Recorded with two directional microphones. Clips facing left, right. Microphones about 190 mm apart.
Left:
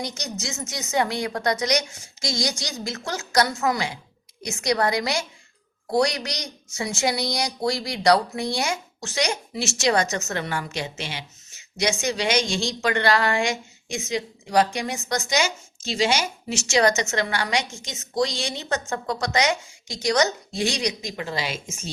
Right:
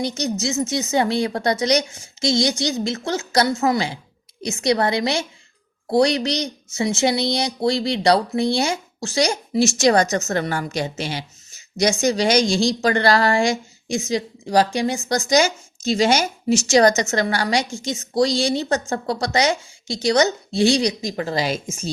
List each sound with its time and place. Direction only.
0.0 s a woman's voice: 30° right (ahead or behind)